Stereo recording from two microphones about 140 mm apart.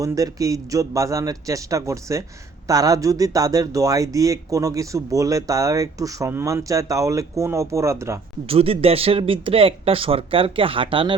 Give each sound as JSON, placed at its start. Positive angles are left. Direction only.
{"t": 0.0, "sound": "speech", "side_deg": -25}
{"t": 8.4, "sound": "speech", "side_deg": -45}